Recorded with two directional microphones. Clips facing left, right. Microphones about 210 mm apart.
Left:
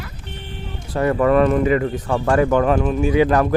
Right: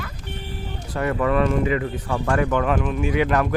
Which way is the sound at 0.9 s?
40° left (ahead or behind).